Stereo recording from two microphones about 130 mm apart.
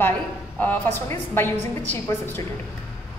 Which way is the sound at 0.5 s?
15° left (ahead or behind).